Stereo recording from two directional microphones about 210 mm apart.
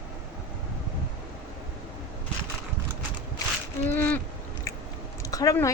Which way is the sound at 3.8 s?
10° left (ahead or behind).